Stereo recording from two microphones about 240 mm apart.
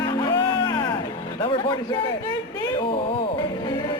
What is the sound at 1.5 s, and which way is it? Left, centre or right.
Speech, left.